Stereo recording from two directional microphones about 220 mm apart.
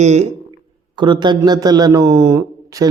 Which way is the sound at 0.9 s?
20° right (ahead or behind).